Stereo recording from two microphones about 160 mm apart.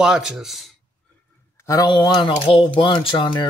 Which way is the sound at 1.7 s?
25° left (ahead or behind).